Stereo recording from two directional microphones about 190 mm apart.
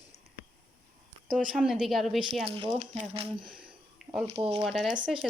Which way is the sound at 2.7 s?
40° right (ahead or behind).